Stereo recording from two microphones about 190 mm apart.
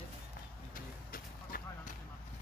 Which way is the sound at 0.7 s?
50° left (ahead or behind).